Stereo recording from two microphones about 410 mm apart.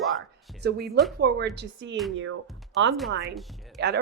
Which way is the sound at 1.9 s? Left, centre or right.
Centre.